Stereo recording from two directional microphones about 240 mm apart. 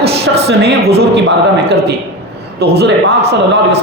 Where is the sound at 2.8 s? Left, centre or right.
Right.